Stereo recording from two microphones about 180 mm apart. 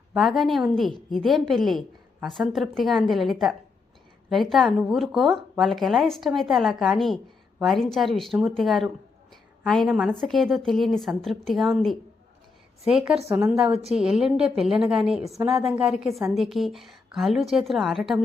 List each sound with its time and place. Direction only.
0.1 s a woman's voice: centre (ahead or behind)